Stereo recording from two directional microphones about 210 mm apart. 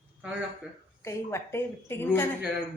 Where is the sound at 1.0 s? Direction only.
10° left (ahead or behind).